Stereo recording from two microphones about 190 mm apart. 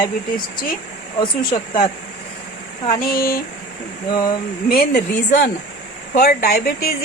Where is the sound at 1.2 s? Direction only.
25° left (ahead or behind).